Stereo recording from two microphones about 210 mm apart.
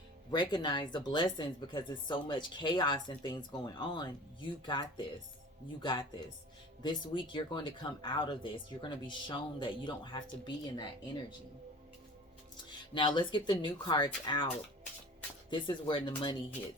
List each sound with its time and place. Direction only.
0.3 s speech: 20° left (ahead or behind)
12.8 s speech: 20° left (ahead or behind)
15.4 s speech: 20° left (ahead or behind)